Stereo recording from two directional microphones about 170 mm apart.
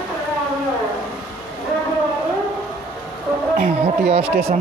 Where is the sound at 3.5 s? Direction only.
45° right (ahead or behind).